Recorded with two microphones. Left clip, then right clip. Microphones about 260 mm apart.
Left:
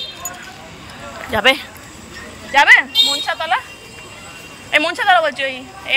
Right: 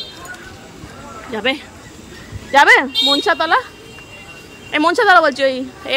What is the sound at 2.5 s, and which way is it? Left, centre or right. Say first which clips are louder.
Speech: even; centre.